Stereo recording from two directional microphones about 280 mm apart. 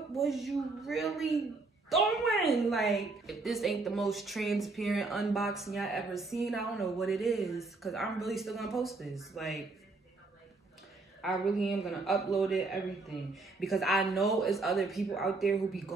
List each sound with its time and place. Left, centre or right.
0.1 s a woman's voice: centre
11.1 s a woman's voice: centre